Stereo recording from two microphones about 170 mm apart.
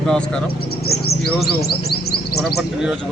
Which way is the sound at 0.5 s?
65° left (ahead or behind).